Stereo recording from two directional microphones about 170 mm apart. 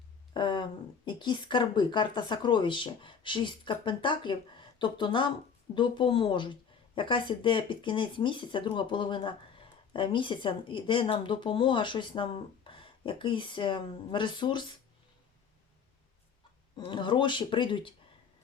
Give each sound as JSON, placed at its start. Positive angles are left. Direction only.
{"t": 0.3, "sound": "speech", "side_deg": 25}
{"t": 16.7, "sound": "speech", "side_deg": 30}